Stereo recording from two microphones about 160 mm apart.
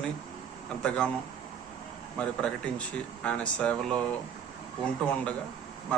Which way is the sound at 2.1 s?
10° left (ahead or behind).